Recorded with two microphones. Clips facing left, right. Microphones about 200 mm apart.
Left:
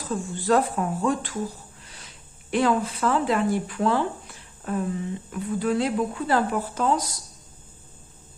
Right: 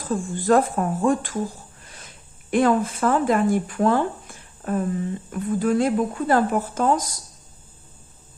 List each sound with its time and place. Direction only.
0.0 s speech: 50° right (ahead or behind)
1.8 s a sound: 50° right (ahead or behind)
2.5 s speech: 50° right (ahead or behind)